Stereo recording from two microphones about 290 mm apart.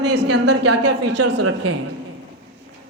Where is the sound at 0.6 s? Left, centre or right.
Right.